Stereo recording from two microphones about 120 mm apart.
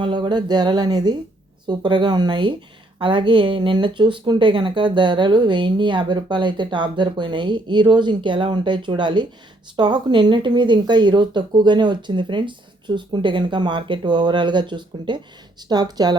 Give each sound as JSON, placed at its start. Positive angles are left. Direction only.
{"t": 0.0, "sound": "speech", "side_deg": -40}